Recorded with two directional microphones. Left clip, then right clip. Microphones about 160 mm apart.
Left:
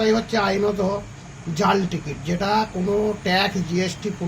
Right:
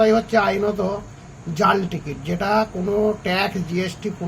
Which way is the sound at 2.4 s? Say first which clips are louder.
Right 2 dB; 15° right (ahead or behind).